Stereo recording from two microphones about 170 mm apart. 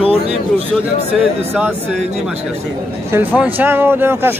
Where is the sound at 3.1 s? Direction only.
10° right (ahead or behind).